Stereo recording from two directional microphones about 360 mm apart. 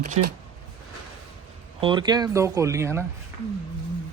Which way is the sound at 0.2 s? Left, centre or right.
Right.